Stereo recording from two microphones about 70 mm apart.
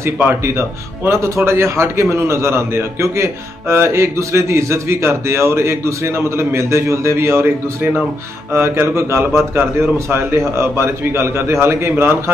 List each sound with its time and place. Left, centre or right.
0.2 s a man's voice: right